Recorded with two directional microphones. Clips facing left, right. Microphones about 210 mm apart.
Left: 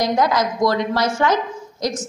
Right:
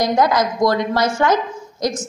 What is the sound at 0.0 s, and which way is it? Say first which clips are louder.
A woman's voice: right 2 dB; 50° right (ahead or behind).